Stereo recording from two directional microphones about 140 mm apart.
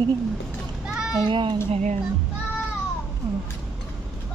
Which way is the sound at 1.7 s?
55° right (ahead or behind).